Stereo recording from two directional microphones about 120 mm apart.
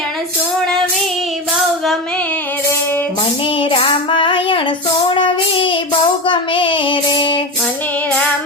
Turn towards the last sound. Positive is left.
turn(degrees=45)  # may be behind; listen again after turning